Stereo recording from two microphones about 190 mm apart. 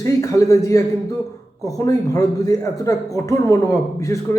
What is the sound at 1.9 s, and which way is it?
A man's voice, 20° left (ahead or behind).